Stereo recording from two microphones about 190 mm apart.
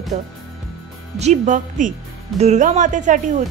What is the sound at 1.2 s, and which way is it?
A woman's voice, 40° right (ahead or behind).